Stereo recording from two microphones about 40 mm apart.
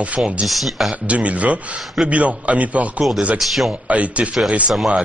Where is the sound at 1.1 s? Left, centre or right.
Right.